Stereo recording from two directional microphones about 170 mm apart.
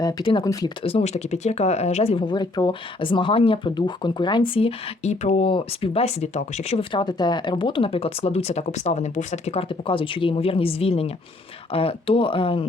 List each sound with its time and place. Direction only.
0.0 s speech: 25° left (ahead or behind)
0.9 s speech: 35° left (ahead or behind)